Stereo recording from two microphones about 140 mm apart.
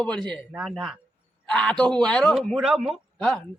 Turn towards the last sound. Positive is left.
turn(degrees=5)  # may be behind; listen again after turning